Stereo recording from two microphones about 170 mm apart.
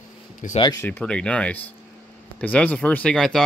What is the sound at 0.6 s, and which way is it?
Speech, 25° left (ahead or behind).